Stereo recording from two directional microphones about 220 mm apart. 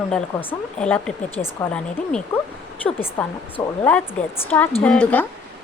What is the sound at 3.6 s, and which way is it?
Speech, 15° left (ahead or behind).